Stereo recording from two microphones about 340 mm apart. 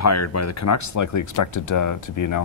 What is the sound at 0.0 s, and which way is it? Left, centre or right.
Speech, left.